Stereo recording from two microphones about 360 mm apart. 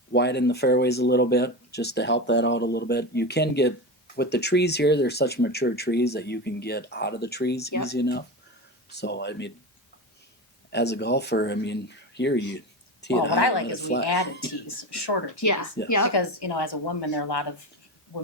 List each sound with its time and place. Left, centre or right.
0.1 s speech: left
10.7 s speech: left
13.3 s a woman's voice: left
15.4 s speech: left
16.1 s a woman's voice: left